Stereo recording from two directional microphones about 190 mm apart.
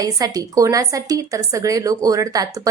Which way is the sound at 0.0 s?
20° right (ahead or behind).